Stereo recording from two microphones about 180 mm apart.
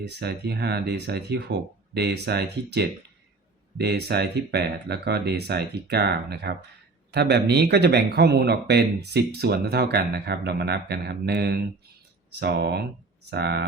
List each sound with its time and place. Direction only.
0.0 s speech: 65° right (ahead or behind)